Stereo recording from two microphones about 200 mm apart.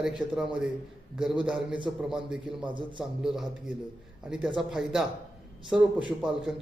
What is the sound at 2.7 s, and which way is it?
Speech, 25° right (ahead or behind).